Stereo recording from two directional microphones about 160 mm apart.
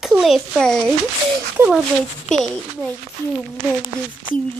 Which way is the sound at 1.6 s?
15° right (ahead or behind).